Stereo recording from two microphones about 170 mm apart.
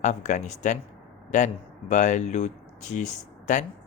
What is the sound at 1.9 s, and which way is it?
Speech, 45° left (ahead or behind).